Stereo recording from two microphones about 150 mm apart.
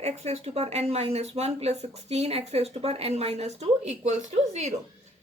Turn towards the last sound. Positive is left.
turn(degrees=-50)  # may be behind; listen again after turning